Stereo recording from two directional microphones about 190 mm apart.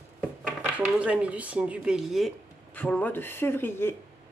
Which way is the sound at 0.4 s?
5° right (ahead or behind).